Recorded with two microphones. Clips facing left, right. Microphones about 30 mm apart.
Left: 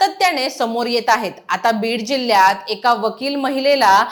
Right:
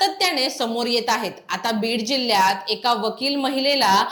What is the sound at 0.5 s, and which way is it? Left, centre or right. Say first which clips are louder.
Speech: left 4 dB; right.